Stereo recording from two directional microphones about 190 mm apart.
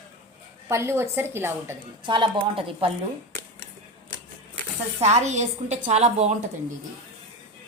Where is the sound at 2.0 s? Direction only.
25° right (ahead or behind).